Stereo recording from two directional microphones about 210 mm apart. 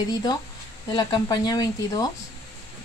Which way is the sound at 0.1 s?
20° left (ahead or behind).